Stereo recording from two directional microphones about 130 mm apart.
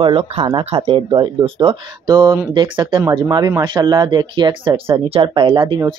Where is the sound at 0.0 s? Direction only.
40° right (ahead or behind).